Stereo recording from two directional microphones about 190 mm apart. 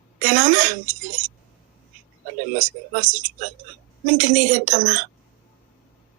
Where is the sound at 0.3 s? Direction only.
45° right (ahead or behind).